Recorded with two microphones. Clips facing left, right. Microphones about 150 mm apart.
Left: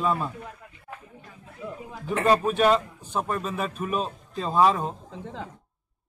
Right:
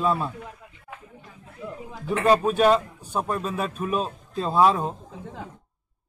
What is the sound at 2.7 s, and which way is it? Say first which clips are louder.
Speech: right 1 dB; 10° right (ahead or behind).